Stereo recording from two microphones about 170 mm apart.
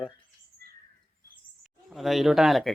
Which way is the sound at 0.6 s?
65° right (ahead or behind).